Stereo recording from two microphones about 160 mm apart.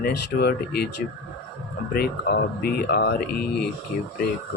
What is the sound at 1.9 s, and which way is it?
Speech, 75° left (ahead or behind).